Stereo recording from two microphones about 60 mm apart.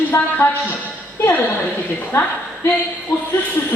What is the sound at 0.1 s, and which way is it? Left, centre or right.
Speech, left.